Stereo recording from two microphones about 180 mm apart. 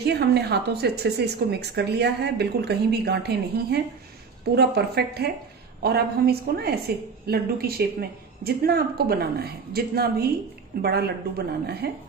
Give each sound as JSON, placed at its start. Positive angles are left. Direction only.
{"t": 0.0, "sound": "a woman's voice", "side_deg": -65}